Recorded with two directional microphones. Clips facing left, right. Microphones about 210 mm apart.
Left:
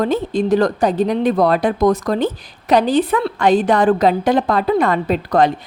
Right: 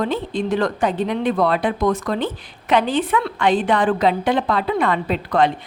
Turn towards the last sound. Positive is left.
turn(degrees=40)  # may be behind; listen again after turning